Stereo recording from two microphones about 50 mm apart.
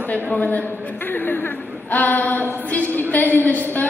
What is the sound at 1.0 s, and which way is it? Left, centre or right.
A woman's voice, left.